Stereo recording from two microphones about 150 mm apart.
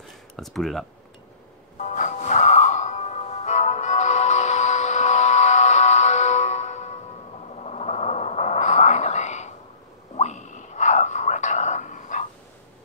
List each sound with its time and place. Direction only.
0.4 s speech: centre (ahead or behind)
1.8 s music: 55° left (ahead or behind)
7.4 s a sound: 45° left (ahead or behind)
10.1 s whispering: 50° left (ahead or behind)